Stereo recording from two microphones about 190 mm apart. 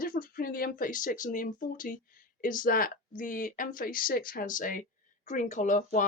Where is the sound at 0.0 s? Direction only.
50° left (ahead or behind).